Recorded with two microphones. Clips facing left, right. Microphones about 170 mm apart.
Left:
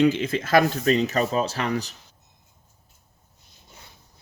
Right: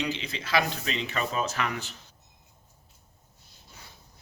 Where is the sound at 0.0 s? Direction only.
50° left (ahead or behind).